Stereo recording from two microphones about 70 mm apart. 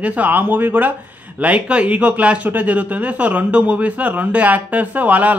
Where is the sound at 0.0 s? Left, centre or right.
Right.